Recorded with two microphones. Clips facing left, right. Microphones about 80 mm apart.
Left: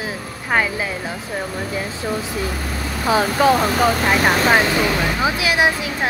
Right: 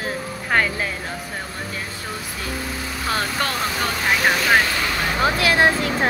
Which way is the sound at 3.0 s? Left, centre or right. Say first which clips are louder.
Left 9 dB; centre.